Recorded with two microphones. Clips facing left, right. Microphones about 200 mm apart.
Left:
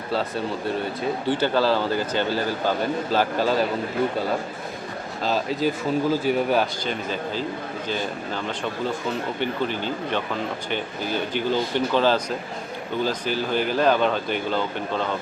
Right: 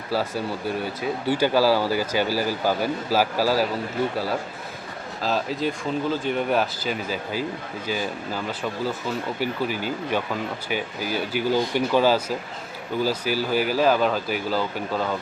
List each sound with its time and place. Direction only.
0.1 s a man's voice: 5° right (ahead or behind)
5.2 s a man's voice: centre (ahead or behind)